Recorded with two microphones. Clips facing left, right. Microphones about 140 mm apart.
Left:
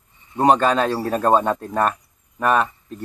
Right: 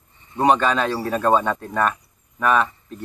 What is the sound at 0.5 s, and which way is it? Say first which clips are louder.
Speech: left 2 dB; 40° left (ahead or behind).